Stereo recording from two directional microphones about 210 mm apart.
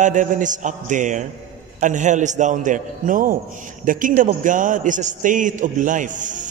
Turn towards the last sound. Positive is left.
turn(degrees=-35)  # may be behind; listen again after turning